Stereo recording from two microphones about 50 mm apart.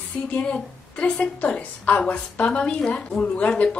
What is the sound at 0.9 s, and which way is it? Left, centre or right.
A woman's voice, left.